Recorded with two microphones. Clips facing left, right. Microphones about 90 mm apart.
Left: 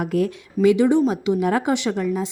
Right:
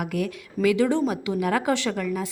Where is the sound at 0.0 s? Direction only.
30° left (ahead or behind).